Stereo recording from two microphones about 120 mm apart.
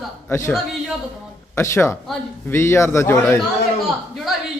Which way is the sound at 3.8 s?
Centre (ahead or behind).